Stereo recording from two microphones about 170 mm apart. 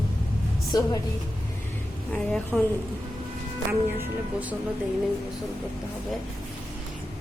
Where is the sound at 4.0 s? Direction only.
10° right (ahead or behind).